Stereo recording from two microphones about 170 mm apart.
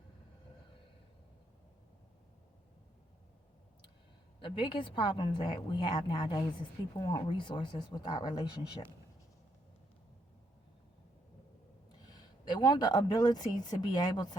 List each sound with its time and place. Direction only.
4.4 s a woman's voice: 30° left (ahead or behind)
12.5 s a woman's voice: 25° left (ahead or behind)